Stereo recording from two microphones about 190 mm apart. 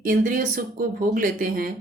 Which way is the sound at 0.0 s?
45° right (ahead or behind).